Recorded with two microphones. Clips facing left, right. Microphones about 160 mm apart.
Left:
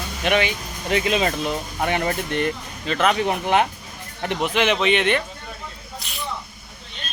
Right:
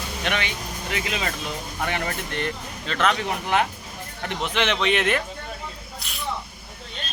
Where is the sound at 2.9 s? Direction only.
10° left (ahead or behind).